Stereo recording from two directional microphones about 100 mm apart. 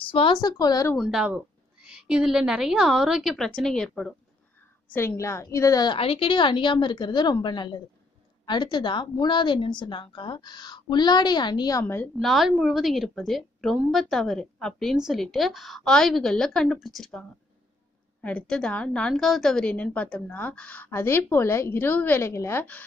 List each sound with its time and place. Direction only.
0.0 s a woman's voice: 60° left (ahead or behind)
0.4 s speech: 40° left (ahead or behind)
0.9 s a woman's voice: 5° right (ahead or behind)
4.8 s a woman's voice: 20° left (ahead or behind)
5.9 s a woman's voice: 65° left (ahead or behind); by 11.8 s 45° left (ahead or behind)
11.8 s a woman's voice: 15° left (ahead or behind)
12.2 s a woman's voice: centre (ahead or behind)
18.2 s a woman's voice: 10° left (ahead or behind)